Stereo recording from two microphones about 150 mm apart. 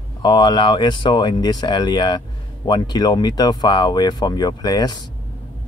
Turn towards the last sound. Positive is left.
turn(degrees=25)  # may be behind; listen again after turning